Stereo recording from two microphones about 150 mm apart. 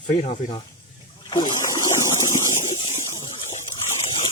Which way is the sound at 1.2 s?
30° left (ahead or behind).